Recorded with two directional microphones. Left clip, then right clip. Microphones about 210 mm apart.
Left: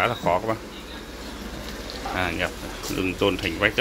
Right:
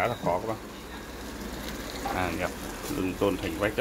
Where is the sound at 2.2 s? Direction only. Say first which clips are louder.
Left 7 dB; 5° right (ahead or behind).